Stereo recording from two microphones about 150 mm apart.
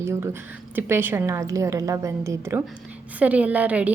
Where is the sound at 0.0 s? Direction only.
20° right (ahead or behind).